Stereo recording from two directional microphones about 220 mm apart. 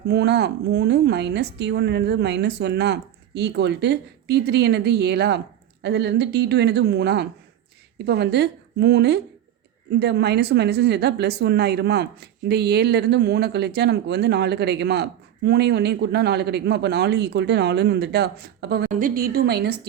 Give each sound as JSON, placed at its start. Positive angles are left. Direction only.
{"t": 0.1, "sound": "speech", "side_deg": -50}